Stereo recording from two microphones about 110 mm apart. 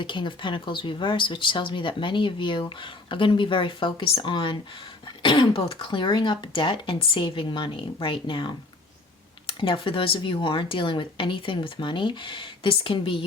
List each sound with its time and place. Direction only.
0.0 s speech: 45° left (ahead or behind)